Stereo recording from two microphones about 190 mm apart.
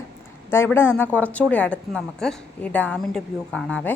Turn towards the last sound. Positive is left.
turn(degrees=5)  # may be behind; listen again after turning